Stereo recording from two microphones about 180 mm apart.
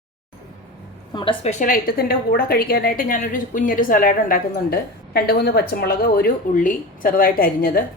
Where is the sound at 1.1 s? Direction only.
30° left (ahead or behind).